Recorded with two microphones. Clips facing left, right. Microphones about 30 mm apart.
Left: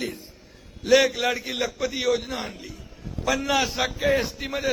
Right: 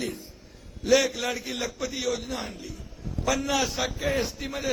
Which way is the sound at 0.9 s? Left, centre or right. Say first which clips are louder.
Left 4 dB; left.